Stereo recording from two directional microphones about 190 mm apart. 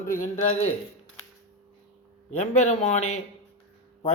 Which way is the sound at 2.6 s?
35° left (ahead or behind).